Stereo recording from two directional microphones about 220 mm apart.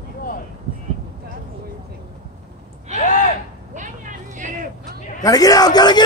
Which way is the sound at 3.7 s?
35° right (ahead or behind).